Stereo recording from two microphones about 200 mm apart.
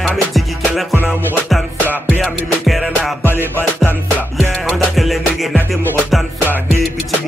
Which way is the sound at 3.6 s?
10° left (ahead or behind).